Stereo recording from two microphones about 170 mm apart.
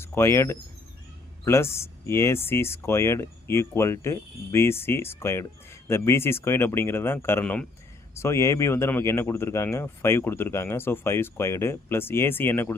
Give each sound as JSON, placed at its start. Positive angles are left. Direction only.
{"t": 0.0, "sound": "speech", "side_deg": 15}